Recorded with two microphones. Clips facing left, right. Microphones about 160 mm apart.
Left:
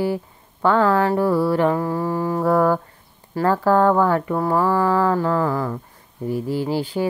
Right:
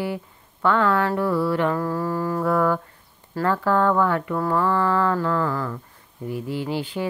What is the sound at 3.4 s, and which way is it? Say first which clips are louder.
Music: left 4 dB; 35° left (ahead or behind).